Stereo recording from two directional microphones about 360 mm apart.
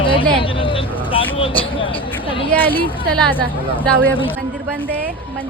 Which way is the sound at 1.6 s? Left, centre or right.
Centre.